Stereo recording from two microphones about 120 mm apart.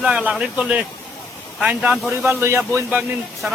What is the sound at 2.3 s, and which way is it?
Speech, 20° right (ahead or behind).